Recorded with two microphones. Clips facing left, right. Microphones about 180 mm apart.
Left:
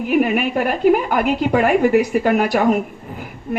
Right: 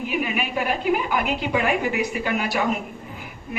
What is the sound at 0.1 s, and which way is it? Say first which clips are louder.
A woman's voice: left 11 dB; 50° left (ahead or behind).